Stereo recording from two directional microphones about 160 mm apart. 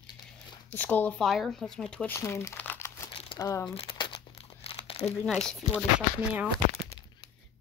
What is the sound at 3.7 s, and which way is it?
Crumpling, 35° left (ahead or behind).